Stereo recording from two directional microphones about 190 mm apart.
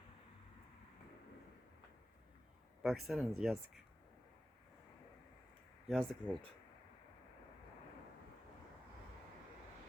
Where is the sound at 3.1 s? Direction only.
5° right (ahead or behind).